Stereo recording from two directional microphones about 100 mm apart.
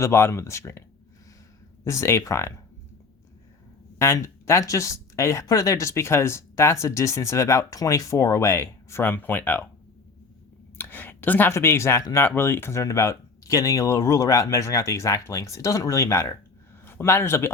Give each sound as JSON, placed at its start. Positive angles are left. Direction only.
{"t": 0.0, "sound": "speech", "side_deg": 25}
{"t": 3.9, "sound": "speech", "side_deg": 25}
{"t": 10.8, "sound": "speech", "side_deg": 20}